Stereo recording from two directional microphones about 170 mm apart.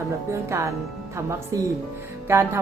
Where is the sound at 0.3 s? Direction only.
15° right (ahead or behind).